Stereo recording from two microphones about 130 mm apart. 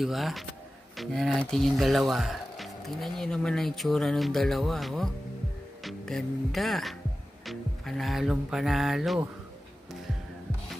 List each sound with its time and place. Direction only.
0.0 s speech: centre (ahead or behind)